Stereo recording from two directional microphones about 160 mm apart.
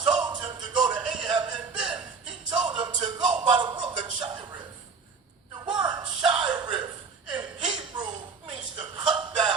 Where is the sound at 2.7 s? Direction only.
30° right (ahead or behind).